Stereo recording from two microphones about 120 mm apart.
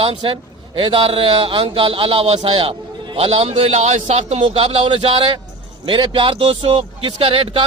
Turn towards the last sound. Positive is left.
turn(degrees=-45)  # may be behind; listen again after turning